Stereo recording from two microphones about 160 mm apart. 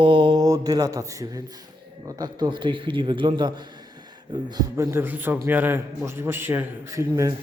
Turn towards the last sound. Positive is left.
turn(degrees=-20)  # may be behind; listen again after turning